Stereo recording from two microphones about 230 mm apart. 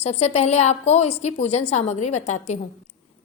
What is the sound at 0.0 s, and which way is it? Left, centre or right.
A woman's voice, left.